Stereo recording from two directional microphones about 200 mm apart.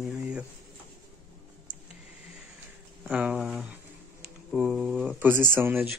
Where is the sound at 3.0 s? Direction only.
5° right (ahead or behind).